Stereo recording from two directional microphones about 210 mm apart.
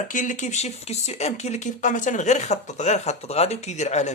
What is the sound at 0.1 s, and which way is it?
Speech, 40° left (ahead or behind).